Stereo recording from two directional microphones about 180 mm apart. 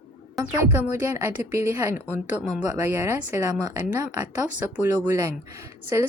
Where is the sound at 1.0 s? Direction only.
15° right (ahead or behind).